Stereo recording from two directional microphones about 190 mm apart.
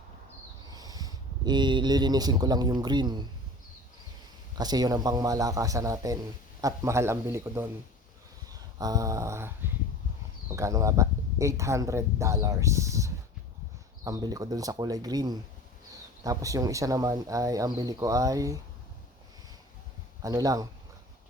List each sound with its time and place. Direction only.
0.7 s speech: 20° right (ahead or behind)
4.5 s a man's voice: 20° right (ahead or behind)
8.8 s speech: 20° right (ahead or behind)
10.5 s a man's voice: 15° right (ahead or behind)
20.2 s a man's voice: 20° right (ahead or behind)